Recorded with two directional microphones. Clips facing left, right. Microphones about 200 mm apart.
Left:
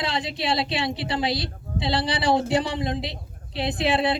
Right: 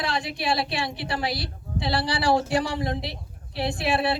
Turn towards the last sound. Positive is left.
turn(degrees=20)  # may be behind; listen again after turning